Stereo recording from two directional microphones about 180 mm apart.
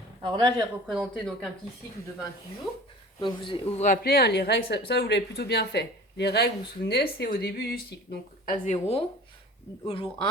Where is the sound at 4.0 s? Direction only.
60° left (ahead or behind).